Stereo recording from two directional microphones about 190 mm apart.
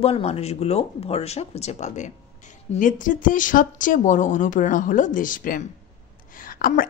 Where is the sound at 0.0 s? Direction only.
30° left (ahead or behind).